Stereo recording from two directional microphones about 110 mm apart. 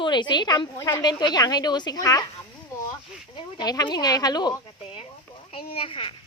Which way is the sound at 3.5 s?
40° left (ahead or behind).